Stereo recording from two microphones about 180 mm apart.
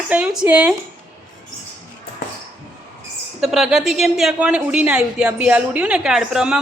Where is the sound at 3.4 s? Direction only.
Centre (ahead or behind).